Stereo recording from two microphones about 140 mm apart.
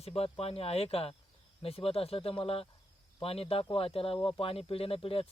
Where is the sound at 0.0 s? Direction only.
45° left (ahead or behind).